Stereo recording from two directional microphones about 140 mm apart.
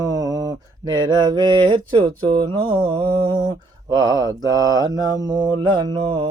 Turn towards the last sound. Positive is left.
turn(degrees=-35)  # may be behind; listen again after turning